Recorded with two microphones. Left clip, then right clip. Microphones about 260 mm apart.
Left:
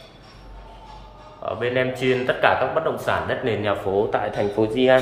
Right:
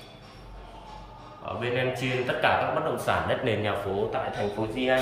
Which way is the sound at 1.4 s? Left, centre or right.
Centre.